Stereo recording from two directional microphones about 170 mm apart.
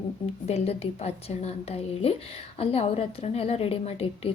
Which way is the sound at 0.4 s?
35° left (ahead or behind).